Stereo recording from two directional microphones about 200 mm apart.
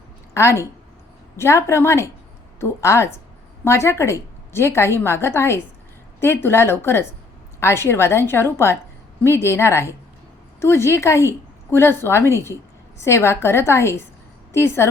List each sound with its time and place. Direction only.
0.3 s a woman's voice: 15° left (ahead or behind)